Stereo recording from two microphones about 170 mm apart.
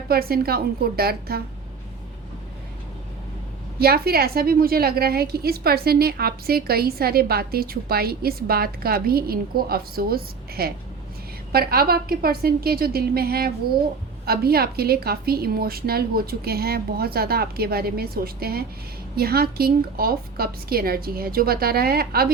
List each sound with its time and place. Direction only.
0.1 s a woman's voice: 65° right (ahead or behind)
3.8 s a woman's voice: 65° right (ahead or behind)